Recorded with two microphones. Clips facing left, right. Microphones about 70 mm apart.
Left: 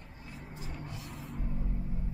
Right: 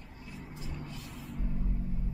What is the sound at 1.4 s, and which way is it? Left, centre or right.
Rumble, centre.